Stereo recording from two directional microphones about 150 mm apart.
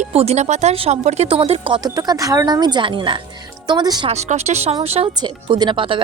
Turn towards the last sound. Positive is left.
turn(degrees=-35)  # may be behind; listen again after turning